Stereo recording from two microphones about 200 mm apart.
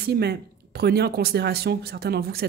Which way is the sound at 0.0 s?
55° right (ahead or behind).